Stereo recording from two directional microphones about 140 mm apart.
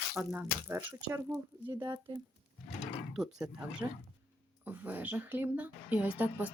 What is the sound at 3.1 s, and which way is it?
Speech, 5° right (ahead or behind).